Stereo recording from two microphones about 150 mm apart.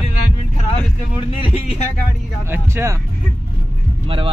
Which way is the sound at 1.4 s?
45° left (ahead or behind).